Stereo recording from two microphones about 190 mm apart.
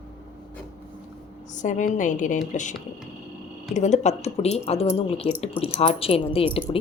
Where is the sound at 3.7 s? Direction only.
35° left (ahead or behind).